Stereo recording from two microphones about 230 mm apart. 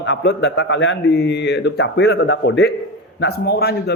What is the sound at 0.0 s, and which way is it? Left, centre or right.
A man's voice, left.